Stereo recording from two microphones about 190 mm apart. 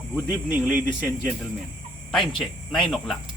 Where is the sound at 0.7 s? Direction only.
5° right (ahead or behind).